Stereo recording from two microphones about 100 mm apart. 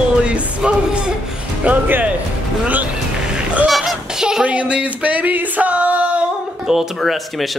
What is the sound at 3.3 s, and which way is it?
Speech, 5° right (ahead or behind).